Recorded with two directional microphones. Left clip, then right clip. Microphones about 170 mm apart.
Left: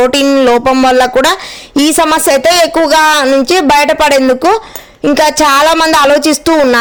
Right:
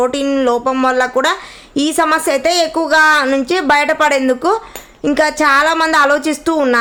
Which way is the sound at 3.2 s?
25° left (ahead or behind).